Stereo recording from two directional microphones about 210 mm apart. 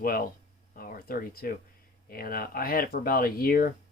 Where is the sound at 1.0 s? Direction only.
45° left (ahead or behind).